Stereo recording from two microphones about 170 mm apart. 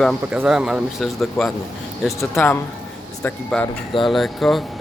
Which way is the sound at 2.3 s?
15° left (ahead or behind).